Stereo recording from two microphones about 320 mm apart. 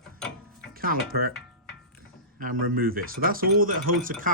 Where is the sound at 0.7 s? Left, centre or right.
Right.